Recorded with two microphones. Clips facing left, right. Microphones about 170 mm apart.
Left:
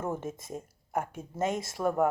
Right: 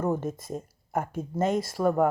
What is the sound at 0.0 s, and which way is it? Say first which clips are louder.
Speech: right 6 dB; 5° left (ahead or behind).